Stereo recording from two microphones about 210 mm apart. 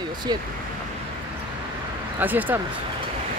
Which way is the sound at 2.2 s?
10° right (ahead or behind).